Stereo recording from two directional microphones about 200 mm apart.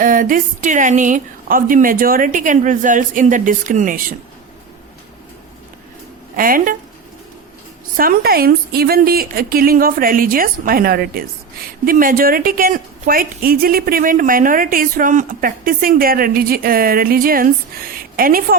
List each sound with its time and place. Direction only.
0.0 s a woman's voice: 40° right (ahead or behind)
6.3 s a woman's voice: 45° right (ahead or behind)
7.9 s a woman's voice: 45° right (ahead or behind)